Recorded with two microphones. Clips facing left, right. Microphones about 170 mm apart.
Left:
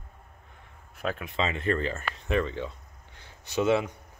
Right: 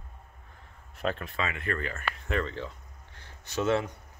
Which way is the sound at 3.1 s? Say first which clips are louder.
Left 4 dB; 15° left (ahead or behind).